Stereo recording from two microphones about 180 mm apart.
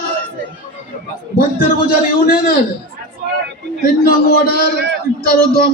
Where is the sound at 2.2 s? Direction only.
55° left (ahead or behind).